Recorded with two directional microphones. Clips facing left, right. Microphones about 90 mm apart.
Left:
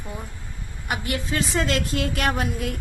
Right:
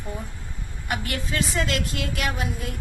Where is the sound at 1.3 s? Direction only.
30° left (ahead or behind).